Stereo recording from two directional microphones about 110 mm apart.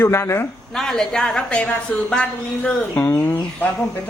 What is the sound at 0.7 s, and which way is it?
A woman's voice, 5° left (ahead or behind).